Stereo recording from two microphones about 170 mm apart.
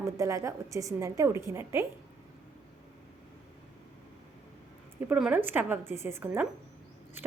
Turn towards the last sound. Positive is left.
turn(degrees=-15)  # may be behind; listen again after turning